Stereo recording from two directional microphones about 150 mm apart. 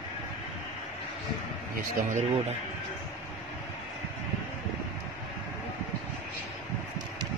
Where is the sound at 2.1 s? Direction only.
50° right (ahead or behind).